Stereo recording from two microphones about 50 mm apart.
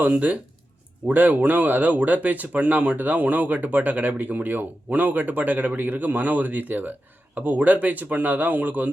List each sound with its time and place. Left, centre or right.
0.0 s speech: right